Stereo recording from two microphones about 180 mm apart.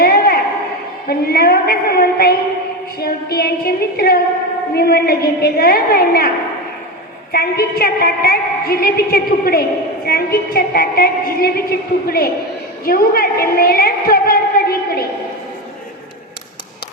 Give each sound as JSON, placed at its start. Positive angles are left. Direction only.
{"t": 0.0, "sound": "a sound", "side_deg": 60}
{"t": 3.0, "sound": "a woman's voice", "side_deg": 60}
{"t": 7.3, "sound": "a woman's voice", "side_deg": 55}